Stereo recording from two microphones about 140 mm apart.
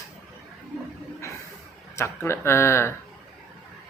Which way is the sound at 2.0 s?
20° left (ahead or behind).